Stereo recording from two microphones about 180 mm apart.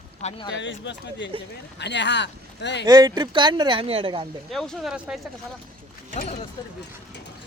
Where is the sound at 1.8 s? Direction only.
75° left (ahead or behind).